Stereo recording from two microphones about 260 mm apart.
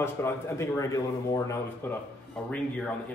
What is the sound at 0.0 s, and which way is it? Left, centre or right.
A man's voice, centre.